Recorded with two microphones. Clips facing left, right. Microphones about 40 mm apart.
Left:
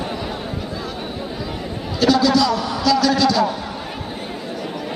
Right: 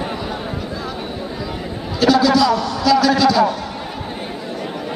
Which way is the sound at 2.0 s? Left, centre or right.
Centre.